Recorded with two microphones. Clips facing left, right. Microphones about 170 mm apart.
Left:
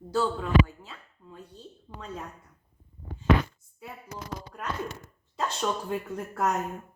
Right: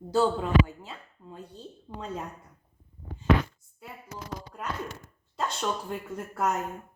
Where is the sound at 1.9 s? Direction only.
20° right (ahead or behind).